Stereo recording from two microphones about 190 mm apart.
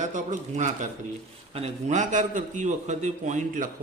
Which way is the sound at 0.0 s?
40° right (ahead or behind).